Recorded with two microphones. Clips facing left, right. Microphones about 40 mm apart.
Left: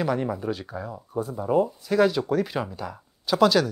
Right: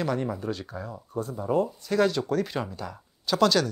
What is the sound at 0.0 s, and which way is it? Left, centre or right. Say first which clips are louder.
Speech: left 3 dB; centre.